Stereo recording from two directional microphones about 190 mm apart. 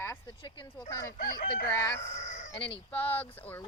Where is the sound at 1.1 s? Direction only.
50° left (ahead or behind).